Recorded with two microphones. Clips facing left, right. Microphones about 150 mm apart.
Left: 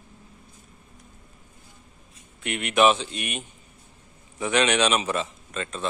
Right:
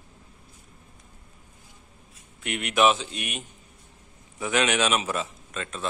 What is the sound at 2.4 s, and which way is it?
A man's voice, centre (ahead or behind).